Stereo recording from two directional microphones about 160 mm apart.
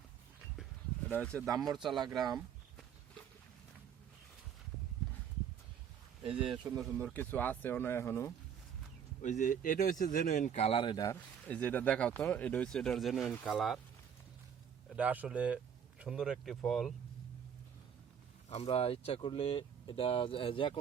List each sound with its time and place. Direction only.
1.1 s speech: 10° left (ahead or behind)
6.7 s speech: centre (ahead or behind)
6.9 s speech: 10° left (ahead or behind)
9.2 s speech: 50° left (ahead or behind); by 11.2 s 25° left (ahead or behind)
11.4 s speech: 10° left (ahead or behind)
14.9 s speech: 10° right (ahead or behind)
18.4 s speech: 40° left (ahead or behind)